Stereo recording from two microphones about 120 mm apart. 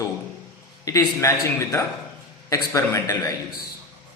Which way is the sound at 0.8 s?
25° left (ahead or behind).